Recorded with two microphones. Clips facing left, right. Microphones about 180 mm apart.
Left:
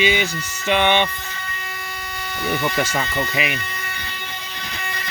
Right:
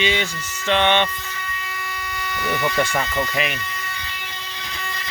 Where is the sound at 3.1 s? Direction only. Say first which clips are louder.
Even; 10° left (ahead or behind).